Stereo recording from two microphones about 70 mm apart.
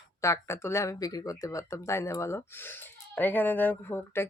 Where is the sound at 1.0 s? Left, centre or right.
Left.